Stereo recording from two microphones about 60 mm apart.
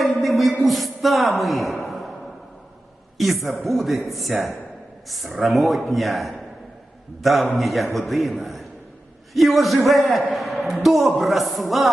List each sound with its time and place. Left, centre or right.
0.0 s music: centre
3.2 s a woman's voice: centre